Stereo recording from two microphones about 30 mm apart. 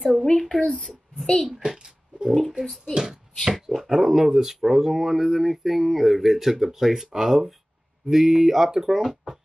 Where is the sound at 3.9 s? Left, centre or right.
Centre.